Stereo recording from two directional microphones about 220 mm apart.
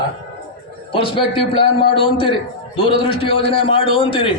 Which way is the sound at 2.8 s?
25° left (ahead or behind).